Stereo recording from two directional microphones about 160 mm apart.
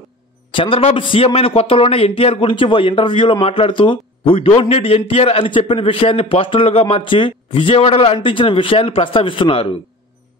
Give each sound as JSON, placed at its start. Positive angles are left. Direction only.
{"t": 0.5, "sound": "a man's voice", "side_deg": 30}